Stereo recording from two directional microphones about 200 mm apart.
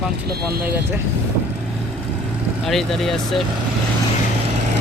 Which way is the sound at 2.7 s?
Centre (ahead or behind).